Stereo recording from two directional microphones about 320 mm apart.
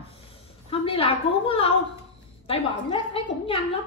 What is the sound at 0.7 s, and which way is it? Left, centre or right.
A woman's voice, centre.